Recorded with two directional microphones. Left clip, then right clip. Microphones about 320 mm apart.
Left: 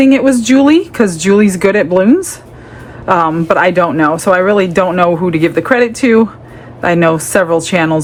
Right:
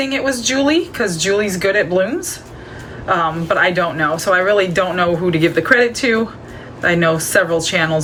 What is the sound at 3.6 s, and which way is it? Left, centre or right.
Speech, centre.